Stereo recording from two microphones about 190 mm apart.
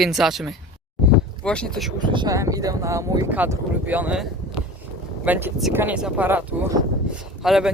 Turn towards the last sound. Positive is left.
turn(degrees=0)  # may be behind; listen again after turning